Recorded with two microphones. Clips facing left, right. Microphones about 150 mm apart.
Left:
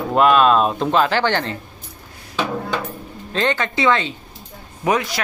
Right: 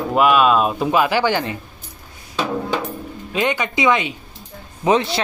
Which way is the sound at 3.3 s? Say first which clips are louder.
Even; 10° right (ahead or behind).